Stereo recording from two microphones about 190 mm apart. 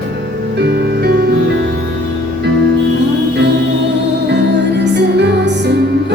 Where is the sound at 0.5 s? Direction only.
60° right (ahead or behind).